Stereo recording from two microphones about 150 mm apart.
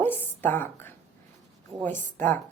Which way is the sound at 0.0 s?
15° left (ahead or behind).